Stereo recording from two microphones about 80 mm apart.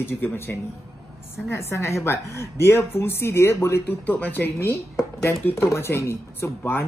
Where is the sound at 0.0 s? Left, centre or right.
Left.